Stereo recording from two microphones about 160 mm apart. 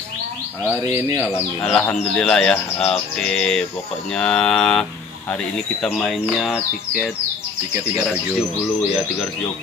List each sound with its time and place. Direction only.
0.7 s bird: 15° right (ahead or behind)
1.6 s speech: 5° left (ahead or behind)
5.9 s speech: centre (ahead or behind)